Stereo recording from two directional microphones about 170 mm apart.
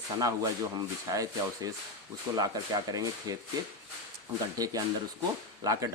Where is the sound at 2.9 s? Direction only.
20° right (ahead or behind).